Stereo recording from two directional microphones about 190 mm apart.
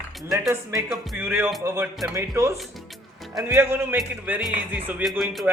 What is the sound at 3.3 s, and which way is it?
Speech, 10° right (ahead or behind).